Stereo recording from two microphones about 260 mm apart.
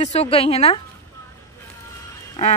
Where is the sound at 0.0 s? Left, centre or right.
Left.